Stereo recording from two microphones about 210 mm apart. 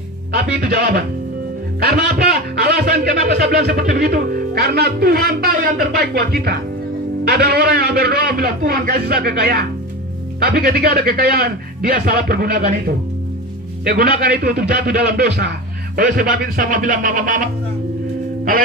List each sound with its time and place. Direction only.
0.3 s a man's voice: 50° right (ahead or behind)